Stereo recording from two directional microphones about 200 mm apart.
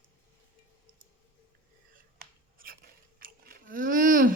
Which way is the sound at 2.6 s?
45° right (ahead or behind).